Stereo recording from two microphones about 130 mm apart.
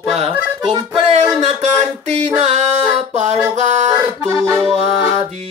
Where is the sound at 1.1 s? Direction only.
60° right (ahead or behind).